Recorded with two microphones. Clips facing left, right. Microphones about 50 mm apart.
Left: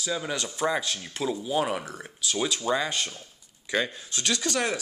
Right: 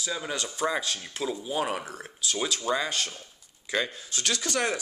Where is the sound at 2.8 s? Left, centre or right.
Left.